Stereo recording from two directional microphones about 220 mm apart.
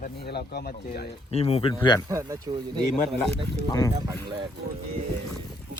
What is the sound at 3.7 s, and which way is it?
Speech, 15° left (ahead or behind).